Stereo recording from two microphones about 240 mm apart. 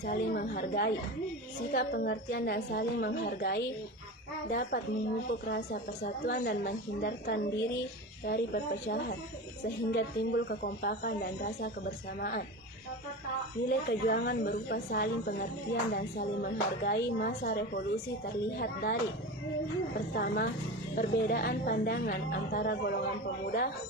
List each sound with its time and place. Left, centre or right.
0.0 s a woman's voice: left
5.5 s a woman's voice: left
13.7 s a woman's voice: left
20.1 s a woman's voice: left